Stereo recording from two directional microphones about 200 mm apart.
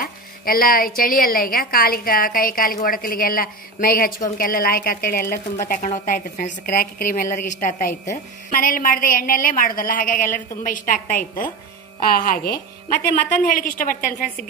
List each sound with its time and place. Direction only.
0.0 s a woman's voice: 45° left (ahead or behind)